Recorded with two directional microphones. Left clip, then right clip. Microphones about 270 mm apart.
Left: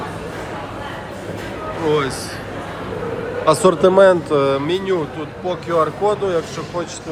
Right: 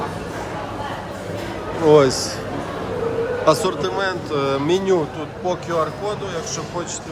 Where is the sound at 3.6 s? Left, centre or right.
Centre.